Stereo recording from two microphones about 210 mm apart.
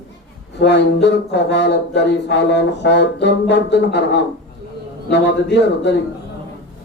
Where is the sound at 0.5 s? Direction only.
55° left (ahead or behind).